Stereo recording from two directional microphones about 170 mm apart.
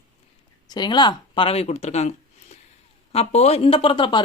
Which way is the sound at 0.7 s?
25° left (ahead or behind).